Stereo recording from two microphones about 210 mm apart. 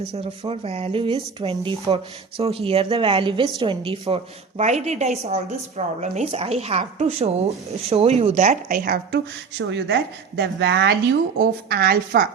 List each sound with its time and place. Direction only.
0.1 s a woman's voice: 25° right (ahead or behind); by 12.3 s 45° right (ahead or behind)